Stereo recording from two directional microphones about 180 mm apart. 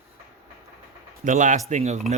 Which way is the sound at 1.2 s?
45° right (ahead or behind).